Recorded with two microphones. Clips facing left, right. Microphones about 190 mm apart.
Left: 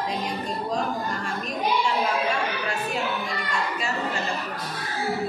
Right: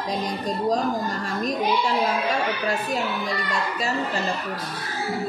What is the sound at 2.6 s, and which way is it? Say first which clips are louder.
Speech: right 3 dB; 40° right (ahead or behind).